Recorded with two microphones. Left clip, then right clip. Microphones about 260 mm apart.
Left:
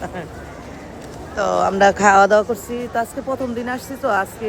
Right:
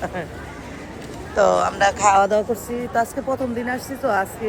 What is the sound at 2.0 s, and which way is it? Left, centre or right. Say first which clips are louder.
Speech: left 2 dB; left.